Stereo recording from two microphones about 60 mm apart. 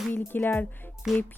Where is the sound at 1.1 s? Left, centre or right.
Centre.